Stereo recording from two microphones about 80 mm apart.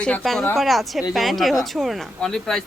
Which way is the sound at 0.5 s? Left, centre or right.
Centre.